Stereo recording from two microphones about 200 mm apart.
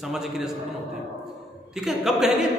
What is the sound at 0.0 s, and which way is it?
Speech, centre (ahead or behind).